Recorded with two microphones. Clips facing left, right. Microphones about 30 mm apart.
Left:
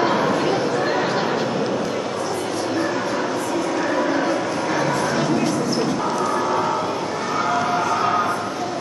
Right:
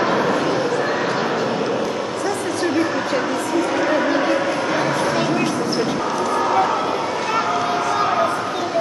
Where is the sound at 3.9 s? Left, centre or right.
Right.